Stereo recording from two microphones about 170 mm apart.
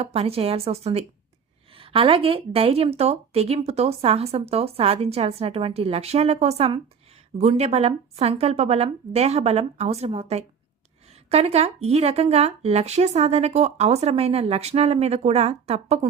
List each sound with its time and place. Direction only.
0.0 s speech: 35° right (ahead or behind)